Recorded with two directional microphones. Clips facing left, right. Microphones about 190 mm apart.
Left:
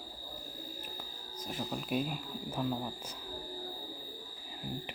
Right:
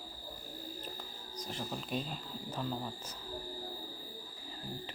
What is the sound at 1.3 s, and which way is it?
Speech, 5° left (ahead or behind).